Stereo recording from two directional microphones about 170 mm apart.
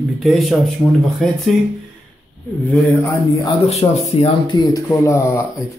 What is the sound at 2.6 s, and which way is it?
Speech, 10° left (ahead or behind).